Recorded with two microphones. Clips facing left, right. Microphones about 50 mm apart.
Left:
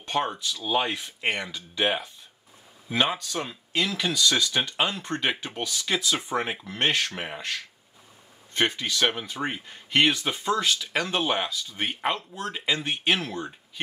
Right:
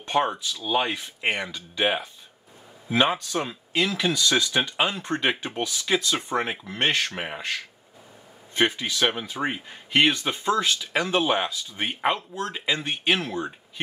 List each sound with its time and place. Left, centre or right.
0.0 s a sound: right
0.3 s speech: centre
5.9 s speech: centre
7.2 s speech: centre
11.3 s speech: right